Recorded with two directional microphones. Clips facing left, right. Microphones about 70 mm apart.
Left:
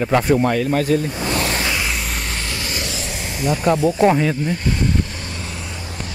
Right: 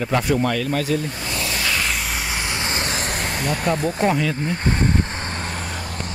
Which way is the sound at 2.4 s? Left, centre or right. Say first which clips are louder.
Right 2 dB; right.